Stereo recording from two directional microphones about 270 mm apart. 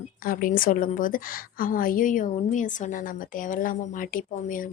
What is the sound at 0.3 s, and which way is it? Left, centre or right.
A woman's voice, left.